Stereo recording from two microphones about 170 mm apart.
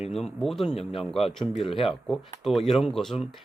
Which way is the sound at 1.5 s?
35° left (ahead or behind).